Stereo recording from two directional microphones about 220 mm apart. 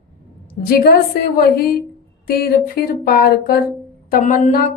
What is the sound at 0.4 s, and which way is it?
Speech, 40° left (ahead or behind).